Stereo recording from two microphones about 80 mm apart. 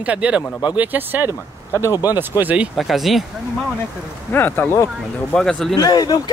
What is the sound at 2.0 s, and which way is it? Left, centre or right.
Speech, right.